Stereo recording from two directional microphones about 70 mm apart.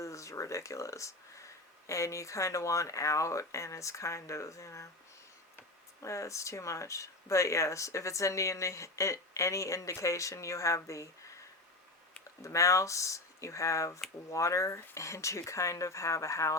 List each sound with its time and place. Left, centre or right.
0.0 s speech: left
6.0 s speech: left
12.4 s speech: left